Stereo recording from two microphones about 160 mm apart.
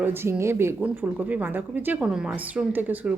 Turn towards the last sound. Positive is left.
turn(degrees=-10)  # may be behind; listen again after turning